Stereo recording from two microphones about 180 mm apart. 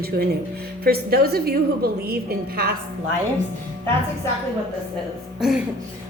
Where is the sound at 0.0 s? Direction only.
60° right (ahead or behind).